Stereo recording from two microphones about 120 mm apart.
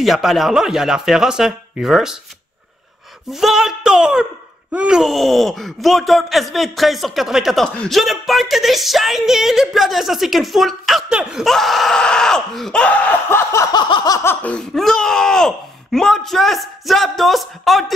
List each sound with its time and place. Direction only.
0.0 s speech: centre (ahead or behind)
3.3 s speech: centre (ahead or behind); by 13.7 s 25° left (ahead or behind)
13.7 s a sound: 40° left (ahead or behind)
14.4 s speech: 5° left (ahead or behind)